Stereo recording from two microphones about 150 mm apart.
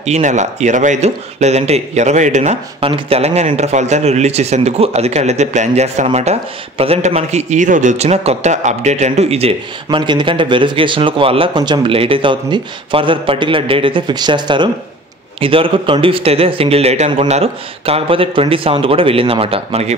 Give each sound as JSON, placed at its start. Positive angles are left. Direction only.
{"t": 0.0, "sound": "a man's voice", "side_deg": -50}
{"t": 2.8, "sound": "a man's voice", "side_deg": -40}
{"t": 9.8, "sound": "speech", "side_deg": -30}